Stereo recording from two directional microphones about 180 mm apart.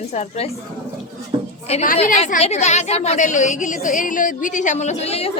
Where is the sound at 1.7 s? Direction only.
35° left (ahead or behind).